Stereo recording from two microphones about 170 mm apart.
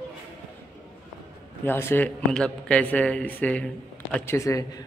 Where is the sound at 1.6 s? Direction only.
15° left (ahead or behind).